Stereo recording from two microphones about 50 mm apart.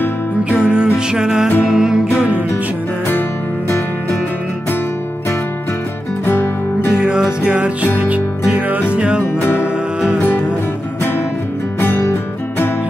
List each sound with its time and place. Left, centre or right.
0.5 s music: centre
2.1 s music: right
6.2 s music: left
7.0 s music: centre; by 8.8 s right
8.9 s music: right
9.2 s music: left
11.8 s music: left